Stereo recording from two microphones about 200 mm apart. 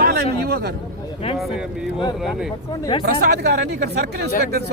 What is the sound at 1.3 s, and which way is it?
Speech, centre (ahead or behind).